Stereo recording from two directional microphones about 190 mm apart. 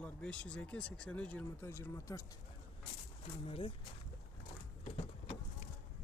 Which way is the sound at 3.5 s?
30° left (ahead or behind).